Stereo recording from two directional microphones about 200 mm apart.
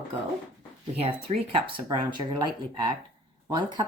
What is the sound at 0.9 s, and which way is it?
Speech, 30° right (ahead or behind).